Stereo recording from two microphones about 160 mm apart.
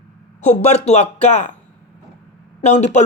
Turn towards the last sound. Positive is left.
turn(degrees=45)  # may be behind; listen again after turning